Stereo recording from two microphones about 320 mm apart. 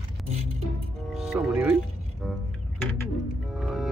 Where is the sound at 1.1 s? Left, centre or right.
Centre.